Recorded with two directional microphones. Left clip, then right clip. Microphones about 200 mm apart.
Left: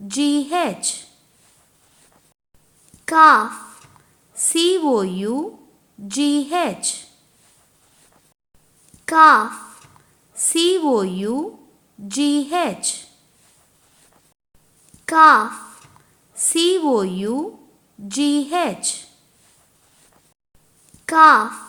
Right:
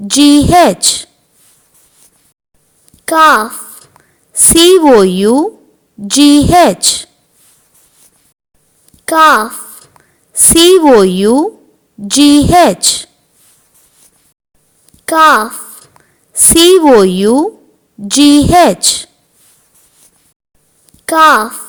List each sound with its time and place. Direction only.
0.1 s a woman's voice: 45° right (ahead or behind)
3.1 s a child's voice: 35° right (ahead or behind)
4.5 s a woman's voice: 45° right (ahead or behind)
9.0 s a child's voice: 35° right (ahead or behind)
10.0 s a sound: 35° right (ahead or behind)
10.3 s a woman's voice: 45° right (ahead or behind)
15.0 s a child's voice: 35° right (ahead or behind)
21.1 s a child's voice: 35° right (ahead or behind)